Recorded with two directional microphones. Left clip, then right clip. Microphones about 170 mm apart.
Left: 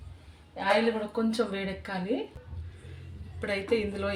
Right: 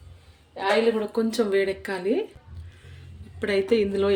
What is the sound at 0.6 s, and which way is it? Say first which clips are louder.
Speech: right 3 dB; 70° right (ahead or behind).